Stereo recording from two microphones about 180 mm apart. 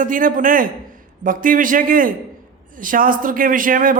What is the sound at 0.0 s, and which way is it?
A man's voice, 50° right (ahead or behind).